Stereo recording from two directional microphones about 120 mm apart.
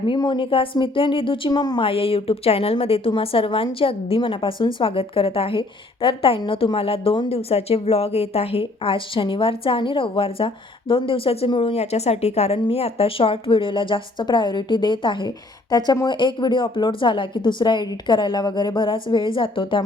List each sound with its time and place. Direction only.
0.2 s a woman's voice: 40° left (ahead or behind)
1.8 s a woman's voice: 50° left (ahead or behind)